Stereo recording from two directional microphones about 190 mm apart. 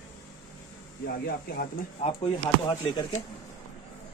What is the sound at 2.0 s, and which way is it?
Speech, 30° left (ahead or behind).